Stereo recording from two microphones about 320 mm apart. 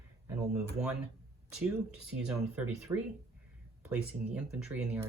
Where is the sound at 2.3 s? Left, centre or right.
Centre.